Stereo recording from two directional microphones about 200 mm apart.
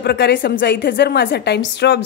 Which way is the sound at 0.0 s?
55° left (ahead or behind).